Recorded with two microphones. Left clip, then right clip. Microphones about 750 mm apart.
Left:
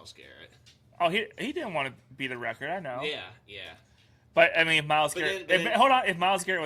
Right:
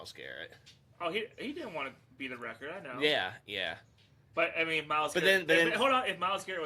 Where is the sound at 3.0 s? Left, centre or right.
Right.